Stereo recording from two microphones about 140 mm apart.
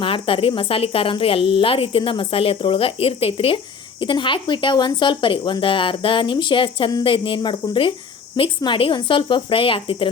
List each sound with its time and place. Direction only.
0.0 s speech: 40° left (ahead or behind)